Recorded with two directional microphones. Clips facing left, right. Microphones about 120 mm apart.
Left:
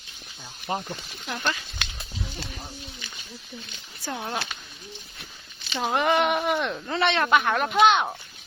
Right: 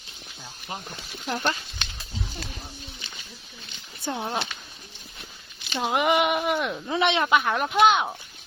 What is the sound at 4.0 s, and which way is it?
Speech, 20° right (ahead or behind).